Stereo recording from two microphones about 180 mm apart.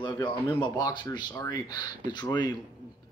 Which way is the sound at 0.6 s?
25° left (ahead or behind).